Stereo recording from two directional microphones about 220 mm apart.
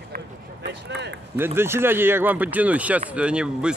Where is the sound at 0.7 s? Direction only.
50° right (ahead or behind).